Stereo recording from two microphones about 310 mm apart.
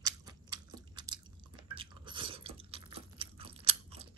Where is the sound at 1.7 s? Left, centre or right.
Centre.